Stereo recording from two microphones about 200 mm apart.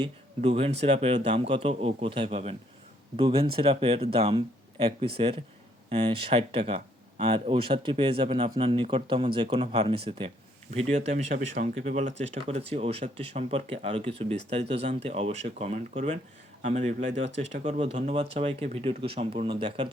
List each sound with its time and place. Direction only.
0.0 s speech: 30° right (ahead or behind)
10.9 s speech: 35° right (ahead or behind)